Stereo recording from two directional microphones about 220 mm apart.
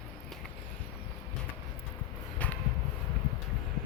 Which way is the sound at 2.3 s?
5° left (ahead or behind).